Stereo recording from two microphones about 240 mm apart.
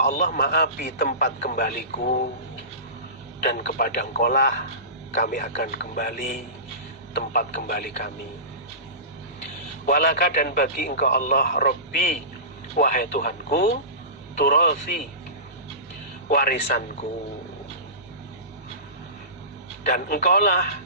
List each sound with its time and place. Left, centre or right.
0.0 s a man's voice: left
3.4 s a man's voice: left
9.8 s a man's voice: left
16.3 s a man's voice: left
19.8 s a man's voice: left